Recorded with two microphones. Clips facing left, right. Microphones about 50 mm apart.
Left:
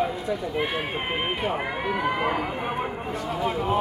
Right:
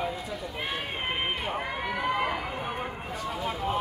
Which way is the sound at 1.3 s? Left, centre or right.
Centre.